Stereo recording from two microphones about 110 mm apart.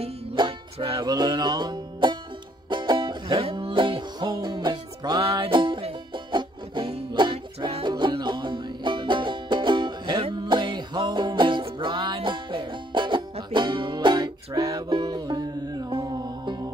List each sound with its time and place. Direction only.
0.0 s music: 55° right (ahead or behind)
0.9 s music: 40° right (ahead or behind)
5.2 s music: 55° right (ahead or behind)
14.6 s music: 30° right (ahead or behind)